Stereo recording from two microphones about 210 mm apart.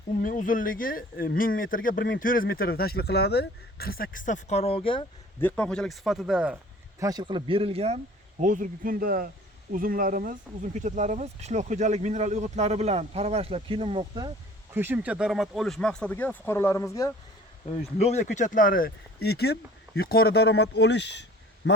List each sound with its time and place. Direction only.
0.2 s speech: 40° left (ahead or behind); by 5.0 s 25° left (ahead or behind)
5.4 s speech: 5° left (ahead or behind)
7.0 s speech: 20° right (ahead or behind)
14.7 s speech: 10° right (ahead or behind); by 17.1 s 15° left (ahead or behind)
17.9 s speech: 30° left (ahead or behind); by 21.7 s 55° left (ahead or behind)